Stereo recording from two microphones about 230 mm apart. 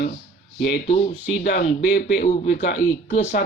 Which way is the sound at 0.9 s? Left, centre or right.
Left.